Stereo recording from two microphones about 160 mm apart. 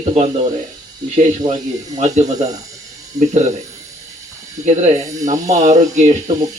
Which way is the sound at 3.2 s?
20° right (ahead or behind).